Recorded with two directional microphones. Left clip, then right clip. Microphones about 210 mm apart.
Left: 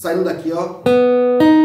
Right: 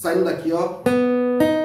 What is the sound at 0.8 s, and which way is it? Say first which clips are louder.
Music: left 10 dB; 40° left (ahead or behind).